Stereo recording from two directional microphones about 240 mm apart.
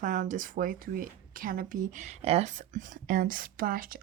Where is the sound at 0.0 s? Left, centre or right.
Right.